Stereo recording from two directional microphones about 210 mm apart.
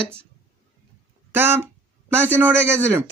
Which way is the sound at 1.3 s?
10° right (ahead or behind).